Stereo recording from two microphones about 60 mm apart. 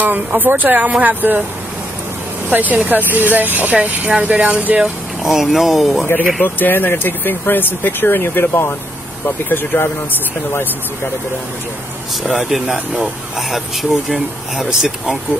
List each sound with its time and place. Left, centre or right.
0.0 s speech: right
2.5 s speech: right
4.8 s speech: centre
6.4 s speech: left
12.2 s speech: centre
14.0 s speech: centre